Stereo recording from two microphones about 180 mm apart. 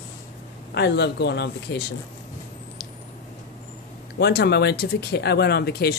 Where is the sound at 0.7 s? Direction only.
70° left (ahead or behind).